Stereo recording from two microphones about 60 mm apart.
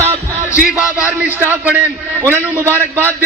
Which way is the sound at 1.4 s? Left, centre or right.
Right.